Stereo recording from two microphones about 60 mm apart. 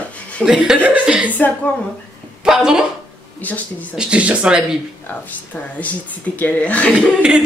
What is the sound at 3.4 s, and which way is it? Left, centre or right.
Speech, left.